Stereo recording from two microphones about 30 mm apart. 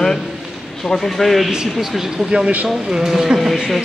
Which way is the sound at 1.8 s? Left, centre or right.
Centre.